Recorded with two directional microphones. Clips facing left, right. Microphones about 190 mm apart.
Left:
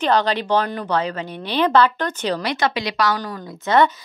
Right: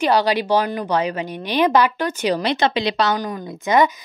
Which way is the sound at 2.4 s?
25° right (ahead or behind).